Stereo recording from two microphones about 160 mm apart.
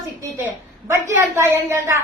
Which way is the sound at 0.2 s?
20° right (ahead or behind).